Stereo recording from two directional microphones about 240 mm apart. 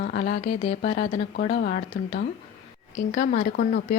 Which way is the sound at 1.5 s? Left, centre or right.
Left.